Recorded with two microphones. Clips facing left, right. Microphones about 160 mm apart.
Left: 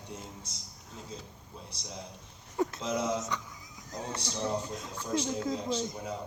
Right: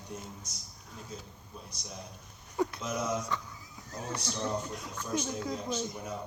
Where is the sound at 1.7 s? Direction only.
30° left (ahead or behind).